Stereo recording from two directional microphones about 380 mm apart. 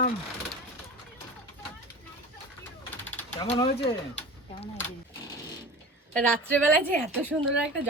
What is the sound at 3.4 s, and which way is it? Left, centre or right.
Speech, centre.